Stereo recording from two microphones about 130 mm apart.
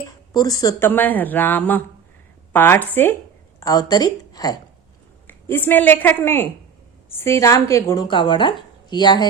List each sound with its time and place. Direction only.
0.3 s speech: 30° left (ahead or behind)
0.8 s a woman's voice: 15° left (ahead or behind)
3.6 s speech: 30° left (ahead or behind)
5.3 s a woman's voice: 15° left (ahead or behind)
8.0 s speech: 35° left (ahead or behind)